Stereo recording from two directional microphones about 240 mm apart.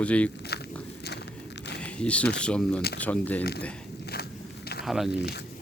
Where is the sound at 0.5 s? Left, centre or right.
Left.